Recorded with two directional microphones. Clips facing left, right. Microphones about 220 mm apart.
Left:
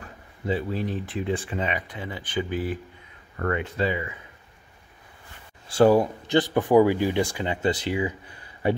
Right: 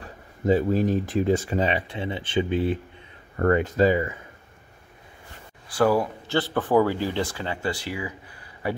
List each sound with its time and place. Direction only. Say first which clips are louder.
0.0 s speech: right 6 dB; 40° right (ahead or behind); by 2.8 s 25° right (ahead or behind)
3.3 s speech: right 6 dB; 40° right (ahead or behind)
5.7 s speech: left 3 dB; 25° left (ahead or behind)